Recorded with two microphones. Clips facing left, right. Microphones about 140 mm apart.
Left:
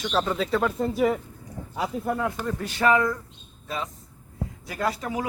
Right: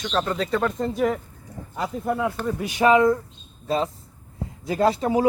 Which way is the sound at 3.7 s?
35° right (ahead or behind).